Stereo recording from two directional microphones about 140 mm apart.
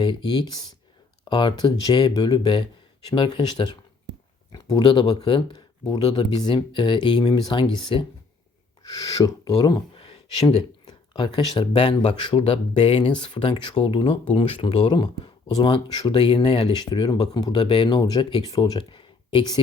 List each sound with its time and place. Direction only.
0.0 s speech: 35° left (ahead or behind)